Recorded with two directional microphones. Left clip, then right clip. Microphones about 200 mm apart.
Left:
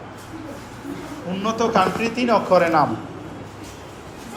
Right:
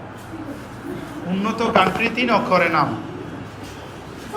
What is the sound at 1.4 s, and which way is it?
A man's voice, 10° left (ahead or behind).